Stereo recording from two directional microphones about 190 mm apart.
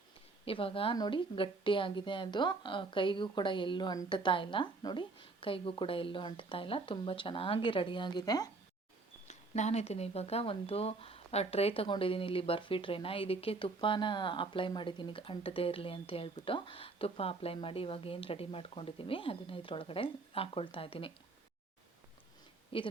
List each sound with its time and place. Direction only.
0.4 s speech: 30° left (ahead or behind)
9.2 s speech: 35° left (ahead or behind)
22.7 s speech: 30° left (ahead or behind)